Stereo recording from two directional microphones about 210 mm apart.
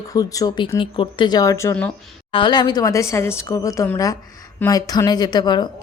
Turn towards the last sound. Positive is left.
turn(degrees=20)  # may be behind; listen again after turning